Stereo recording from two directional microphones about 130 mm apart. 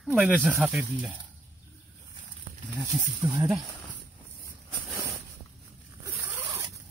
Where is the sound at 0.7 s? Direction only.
5° right (ahead or behind).